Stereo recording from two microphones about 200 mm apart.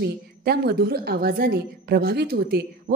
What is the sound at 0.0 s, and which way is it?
A woman's voice, 55° right (ahead or behind).